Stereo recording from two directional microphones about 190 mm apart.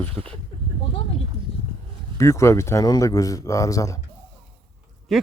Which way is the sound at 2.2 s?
15° left (ahead or behind).